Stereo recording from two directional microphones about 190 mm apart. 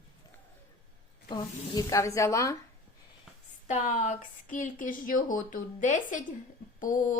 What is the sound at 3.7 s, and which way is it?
Speech, 40° left (ahead or behind).